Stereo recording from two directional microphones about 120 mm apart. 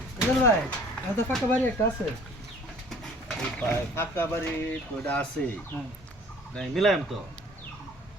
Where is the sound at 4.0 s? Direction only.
20° left (ahead or behind).